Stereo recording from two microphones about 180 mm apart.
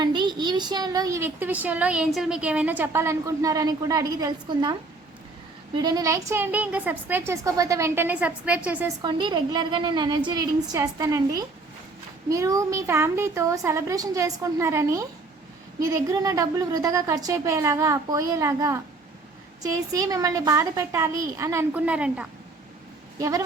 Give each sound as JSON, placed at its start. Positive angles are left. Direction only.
{"t": 0.0, "sound": "a child's voice", "side_deg": -25}
{"t": 9.0, "sound": "a child's voice", "side_deg": -25}
{"t": 23.1, "sound": "a woman's voice", "side_deg": -20}